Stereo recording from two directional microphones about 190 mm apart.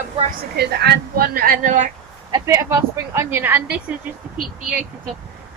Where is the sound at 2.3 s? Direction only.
15° right (ahead or behind).